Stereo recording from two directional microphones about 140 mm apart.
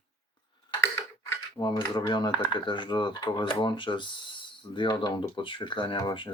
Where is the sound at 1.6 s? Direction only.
30° left (ahead or behind).